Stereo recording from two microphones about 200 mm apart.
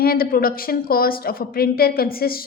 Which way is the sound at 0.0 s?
50° left (ahead or behind).